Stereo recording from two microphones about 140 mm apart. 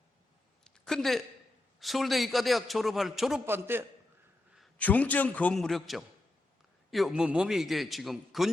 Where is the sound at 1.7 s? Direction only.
Centre (ahead or behind).